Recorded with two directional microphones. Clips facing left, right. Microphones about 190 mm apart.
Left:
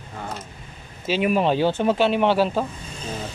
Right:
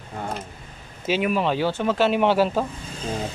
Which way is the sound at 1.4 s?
25° left (ahead or behind).